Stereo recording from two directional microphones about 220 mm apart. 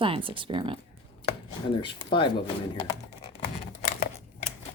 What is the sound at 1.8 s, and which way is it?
Speech, 20° left (ahead or behind).